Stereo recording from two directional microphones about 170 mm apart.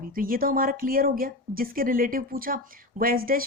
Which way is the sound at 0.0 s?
55° right (ahead or behind).